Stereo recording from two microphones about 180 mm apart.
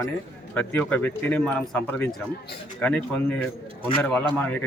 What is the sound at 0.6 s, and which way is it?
A man's voice, 10° left (ahead or behind).